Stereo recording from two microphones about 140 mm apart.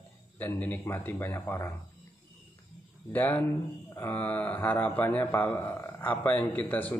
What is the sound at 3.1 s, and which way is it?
A man's voice, 10° left (ahead or behind).